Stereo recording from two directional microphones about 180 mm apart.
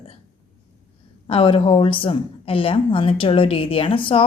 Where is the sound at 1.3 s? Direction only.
30° left (ahead or behind).